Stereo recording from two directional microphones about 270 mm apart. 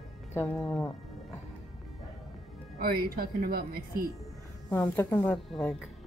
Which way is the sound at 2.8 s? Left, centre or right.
Right.